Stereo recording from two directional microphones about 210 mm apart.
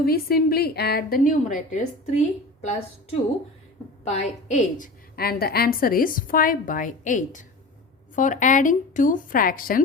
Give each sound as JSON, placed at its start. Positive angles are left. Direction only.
{"t": 0.0, "sound": "a woman's voice", "side_deg": 45}